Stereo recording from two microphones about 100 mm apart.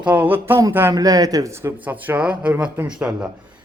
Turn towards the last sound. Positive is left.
turn(degrees=-10)  # may be behind; listen again after turning